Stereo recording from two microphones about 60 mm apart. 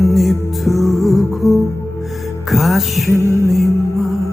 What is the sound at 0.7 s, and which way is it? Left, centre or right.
Music, left.